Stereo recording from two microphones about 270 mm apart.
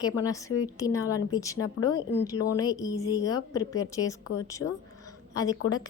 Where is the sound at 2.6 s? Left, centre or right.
Centre.